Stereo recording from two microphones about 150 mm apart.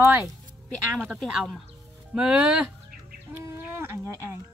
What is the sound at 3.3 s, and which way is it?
Fowl, 15° right (ahead or behind).